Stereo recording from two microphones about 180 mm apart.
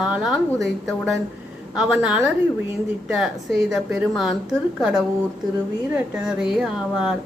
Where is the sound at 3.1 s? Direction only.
Centre (ahead or behind).